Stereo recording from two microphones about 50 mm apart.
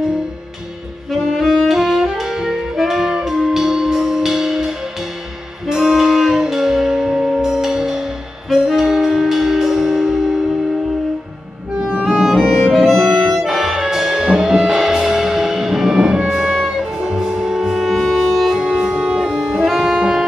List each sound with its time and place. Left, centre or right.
1.1 s saxophone: centre
1.7 s saxophone: centre
5.7 s music: centre
7.4 s saxophone: centre
12.0 s music: centre
12.4 s music: centre
18.5 s saxophone: centre
20.0 s music: centre